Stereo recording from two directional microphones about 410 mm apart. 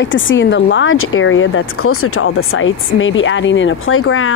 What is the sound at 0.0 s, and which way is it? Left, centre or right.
Speech, left.